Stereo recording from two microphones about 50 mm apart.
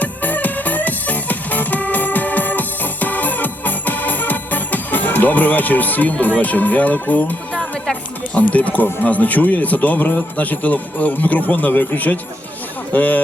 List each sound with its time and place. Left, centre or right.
0.0 s music: left
6.4 s speech: left
7.5 s music: centre
8.4 s speech: left